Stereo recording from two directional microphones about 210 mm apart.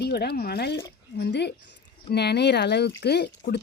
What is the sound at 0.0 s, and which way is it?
Speech, 50° left (ahead or behind).